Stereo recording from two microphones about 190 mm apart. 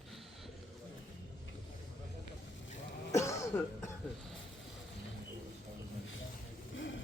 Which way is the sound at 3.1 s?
15° left (ahead or behind).